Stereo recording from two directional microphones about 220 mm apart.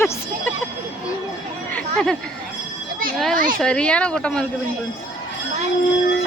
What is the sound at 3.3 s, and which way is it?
Speech, 40° right (ahead or behind).